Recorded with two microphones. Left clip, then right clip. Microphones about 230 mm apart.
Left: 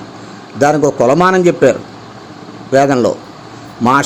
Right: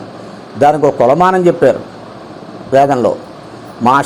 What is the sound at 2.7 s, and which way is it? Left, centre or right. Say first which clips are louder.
Speech: right 1 dB; left.